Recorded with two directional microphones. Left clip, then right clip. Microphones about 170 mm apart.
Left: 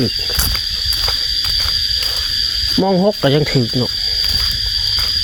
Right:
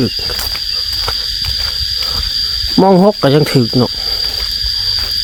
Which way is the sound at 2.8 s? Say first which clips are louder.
Right 7 dB; 35° right (ahead or behind).